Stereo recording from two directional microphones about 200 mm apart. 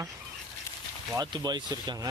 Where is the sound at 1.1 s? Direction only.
20° right (ahead or behind).